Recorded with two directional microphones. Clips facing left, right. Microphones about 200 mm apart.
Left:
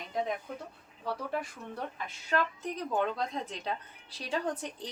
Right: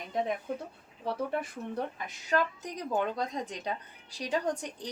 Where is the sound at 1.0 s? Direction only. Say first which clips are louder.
Right 3 dB; 20° right (ahead or behind).